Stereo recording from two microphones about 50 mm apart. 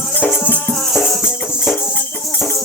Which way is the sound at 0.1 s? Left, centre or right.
Left.